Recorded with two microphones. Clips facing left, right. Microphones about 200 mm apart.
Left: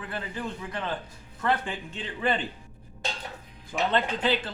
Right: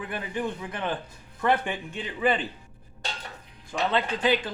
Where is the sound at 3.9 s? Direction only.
10° right (ahead or behind).